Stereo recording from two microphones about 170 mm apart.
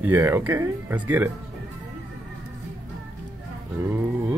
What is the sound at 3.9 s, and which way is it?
Speech, 10° right (ahead or behind).